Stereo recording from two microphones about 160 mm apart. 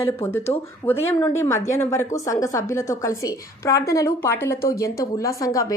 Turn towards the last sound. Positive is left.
turn(degrees=20)  # may be behind; listen again after turning